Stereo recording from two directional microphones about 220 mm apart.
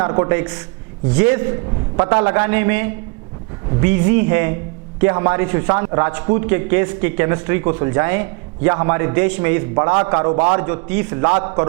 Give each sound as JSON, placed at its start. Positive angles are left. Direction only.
{"t": 0.0, "sound": "a man's voice", "side_deg": -15}